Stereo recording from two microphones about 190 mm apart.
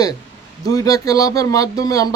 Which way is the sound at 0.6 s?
20° left (ahead or behind).